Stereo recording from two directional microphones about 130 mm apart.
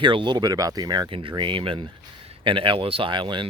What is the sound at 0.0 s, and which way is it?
Speech, 40° right (ahead or behind).